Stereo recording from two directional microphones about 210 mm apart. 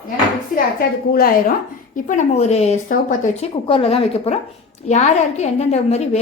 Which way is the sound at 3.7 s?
25° left (ahead or behind).